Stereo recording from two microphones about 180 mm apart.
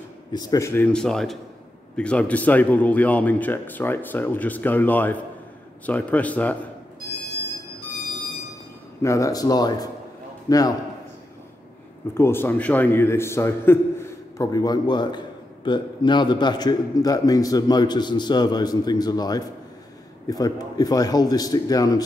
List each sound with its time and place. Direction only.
0.3 s a man's voice: 20° left (ahead or behind)
0.9 s a man's voice: 5° left (ahead or behind)
9.0 s a man's voice: 15° left (ahead or behind)
12.1 s a man's voice: 15° left (ahead or behind)